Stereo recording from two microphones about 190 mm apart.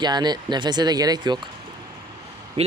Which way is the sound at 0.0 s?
20° right (ahead or behind).